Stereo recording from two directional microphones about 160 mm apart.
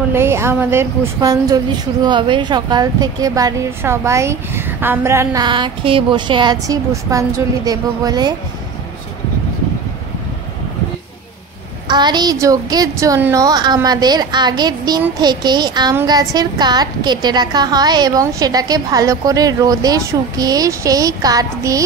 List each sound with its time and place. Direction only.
0.1 s a woman's voice: 15° right (ahead or behind)
11.9 s a woman's voice: 25° right (ahead or behind)